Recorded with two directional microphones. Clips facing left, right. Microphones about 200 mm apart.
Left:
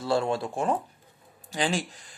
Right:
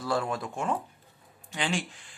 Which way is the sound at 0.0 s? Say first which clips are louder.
Left 4 dB; 25° left (ahead or behind).